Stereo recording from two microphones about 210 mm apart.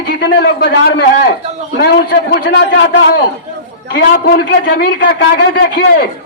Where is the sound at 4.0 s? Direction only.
45° left (ahead or behind).